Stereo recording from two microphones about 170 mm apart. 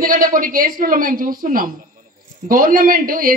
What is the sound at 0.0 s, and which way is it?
Speech, 55° right (ahead or behind).